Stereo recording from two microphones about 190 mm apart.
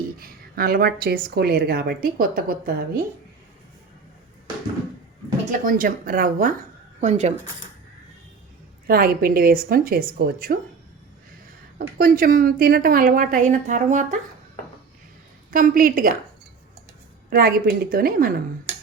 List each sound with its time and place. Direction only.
0.2 s a woman's voice: 50° right (ahead or behind)
5.5 s a woman's voice: 45° right (ahead or behind)
7.0 s speech: 35° right (ahead or behind)
8.9 s a woman's voice: 50° right (ahead or behind)
11.8 s a woman's voice: 50° right (ahead or behind)
15.4 s a woman's voice: 45° right (ahead or behind)
17.2 s a woman's voice: 55° right (ahead or behind)